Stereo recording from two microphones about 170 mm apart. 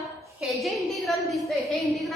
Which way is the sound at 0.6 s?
Centre (ahead or behind).